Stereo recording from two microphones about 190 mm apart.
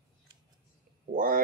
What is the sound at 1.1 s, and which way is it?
Speech, 45° right (ahead or behind).